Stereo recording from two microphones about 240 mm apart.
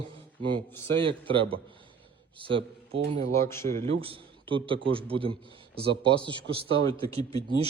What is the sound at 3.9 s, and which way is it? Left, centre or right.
A man's voice, right.